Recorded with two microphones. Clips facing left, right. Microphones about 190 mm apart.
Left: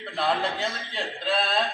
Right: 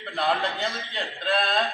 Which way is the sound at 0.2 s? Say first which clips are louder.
Even; centre (ahead or behind).